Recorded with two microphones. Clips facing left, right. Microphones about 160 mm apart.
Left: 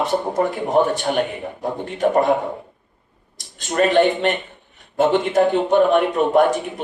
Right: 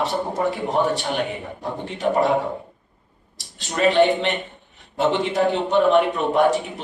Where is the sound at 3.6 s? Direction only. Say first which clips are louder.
Left 1 dB; 50° left (ahead or behind).